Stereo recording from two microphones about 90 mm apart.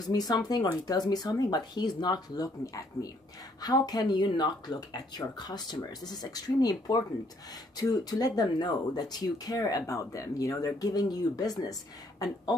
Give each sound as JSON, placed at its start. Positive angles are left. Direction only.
{"t": 0.0, "sound": "speech", "side_deg": 45}